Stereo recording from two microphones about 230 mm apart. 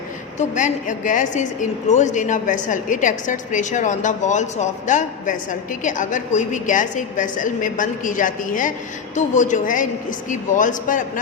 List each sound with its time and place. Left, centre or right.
0.3 s a woman's voice: left